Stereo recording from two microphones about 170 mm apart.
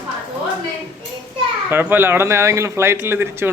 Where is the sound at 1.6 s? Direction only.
15° right (ahead or behind).